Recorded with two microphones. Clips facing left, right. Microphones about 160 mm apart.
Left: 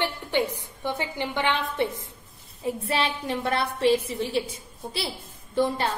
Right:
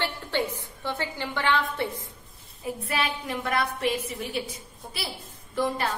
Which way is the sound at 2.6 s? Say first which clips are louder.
Left 3 dB; 30° left (ahead or behind).